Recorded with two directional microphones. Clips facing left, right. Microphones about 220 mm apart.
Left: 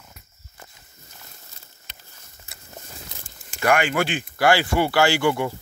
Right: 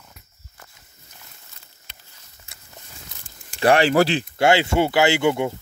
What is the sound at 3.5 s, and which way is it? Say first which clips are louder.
Speech: right 5 dB; 30° right (ahead or behind).